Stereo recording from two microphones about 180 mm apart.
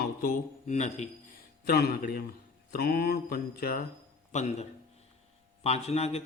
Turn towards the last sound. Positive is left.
turn(degrees=35)  # may be behind; listen again after turning